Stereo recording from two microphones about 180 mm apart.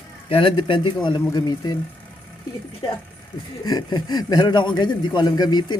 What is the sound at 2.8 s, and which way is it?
A man's voice, 25° left (ahead or behind).